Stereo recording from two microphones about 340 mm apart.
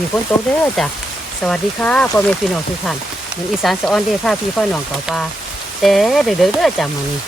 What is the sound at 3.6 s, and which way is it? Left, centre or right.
Speech, centre.